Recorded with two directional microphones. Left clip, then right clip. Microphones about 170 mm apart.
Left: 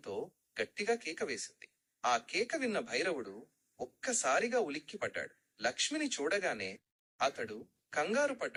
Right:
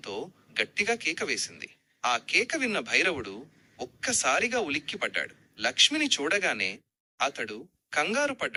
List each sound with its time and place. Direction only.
0.1 s speech: 25° right (ahead or behind)
3.2 s speech: 35° right (ahead or behind)
3.8 s a sound: 20° right (ahead or behind)
4.4 s speech: 20° right (ahead or behind)